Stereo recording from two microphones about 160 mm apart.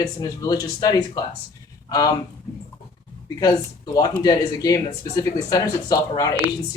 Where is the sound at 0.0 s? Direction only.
20° left (ahead or behind).